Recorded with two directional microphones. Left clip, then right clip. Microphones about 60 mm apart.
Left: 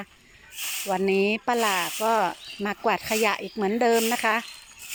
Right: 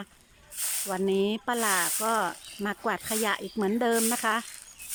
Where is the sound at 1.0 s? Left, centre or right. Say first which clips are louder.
Left 3 dB; centre.